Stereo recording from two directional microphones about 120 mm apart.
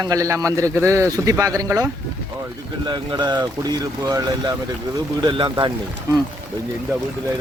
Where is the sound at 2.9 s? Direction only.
35° right (ahead or behind).